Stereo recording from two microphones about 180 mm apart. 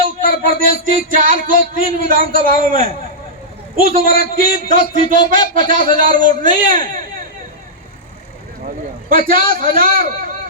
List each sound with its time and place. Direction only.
0.2 s a sound: 50° right (ahead or behind)
1.1 s a man's voice: 50° right (ahead or behind)
8.6 s a man's voice: 50° right (ahead or behind)